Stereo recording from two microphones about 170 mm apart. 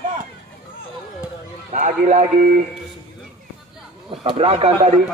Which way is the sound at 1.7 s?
45° right (ahead or behind).